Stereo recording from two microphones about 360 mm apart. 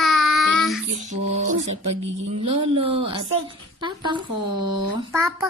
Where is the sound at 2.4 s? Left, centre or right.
Centre.